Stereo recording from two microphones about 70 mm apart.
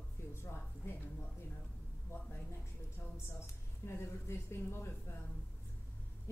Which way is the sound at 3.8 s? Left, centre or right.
Left.